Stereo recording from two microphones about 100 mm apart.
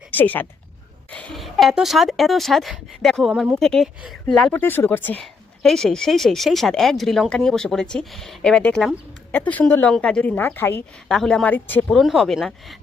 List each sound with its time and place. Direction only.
0.1 s speech: 20° left (ahead or behind)
1.1 s a sound: 10° left (ahead or behind)
1.4 s speech: centre (ahead or behind)
4.5 s speech: 20° left (ahead or behind)
5.2 s a woman's voice: 5° left (ahead or behind); by 10.8 s 20° left (ahead or behind)
11.1 s speech: 5° left (ahead or behind)
11.4 s speech: 20° left (ahead or behind)
11.9 s speech: centre (ahead or behind)